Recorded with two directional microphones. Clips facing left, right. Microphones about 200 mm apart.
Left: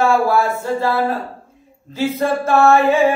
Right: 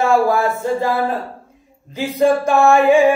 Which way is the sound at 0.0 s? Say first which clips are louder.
Even; 20° right (ahead or behind).